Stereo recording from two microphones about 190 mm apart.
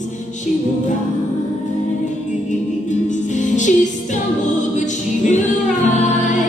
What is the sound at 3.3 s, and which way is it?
Music, 40° left (ahead or behind).